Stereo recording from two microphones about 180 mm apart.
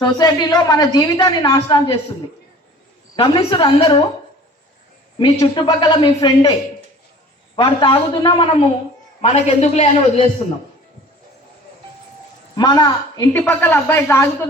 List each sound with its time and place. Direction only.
0.0 s a woman's voice: 20° left (ahead or behind)
3.2 s a woman's voice: 25° left (ahead or behind)
5.2 s a woman's voice: 30° left (ahead or behind)
7.5 s a woman's voice: 30° left (ahead or behind)
12.5 s a woman's voice: 20° left (ahead or behind)